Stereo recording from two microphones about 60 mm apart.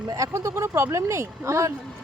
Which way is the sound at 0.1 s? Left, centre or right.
Right.